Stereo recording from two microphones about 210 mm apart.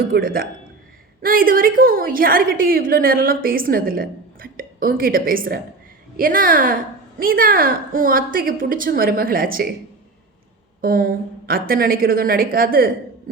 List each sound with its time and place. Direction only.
0.0 s a woman's voice: 45° right (ahead or behind)
10.8 s a woman's voice: 45° right (ahead or behind)